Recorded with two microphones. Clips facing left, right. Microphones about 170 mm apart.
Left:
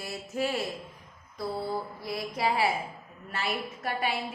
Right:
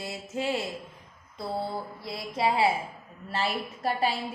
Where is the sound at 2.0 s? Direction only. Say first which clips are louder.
Right 4 dB; 25° right (ahead or behind).